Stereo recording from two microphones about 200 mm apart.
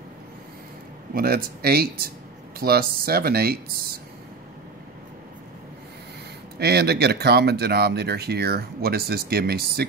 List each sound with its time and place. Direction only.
1.1 s speech: 50° right (ahead or behind)
6.6 s speech: 55° right (ahead or behind)